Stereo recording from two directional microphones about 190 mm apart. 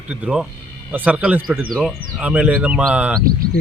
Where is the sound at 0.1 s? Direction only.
5° right (ahead or behind).